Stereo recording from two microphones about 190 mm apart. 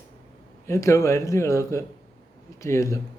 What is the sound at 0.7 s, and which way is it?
Speech, 15° left (ahead or behind).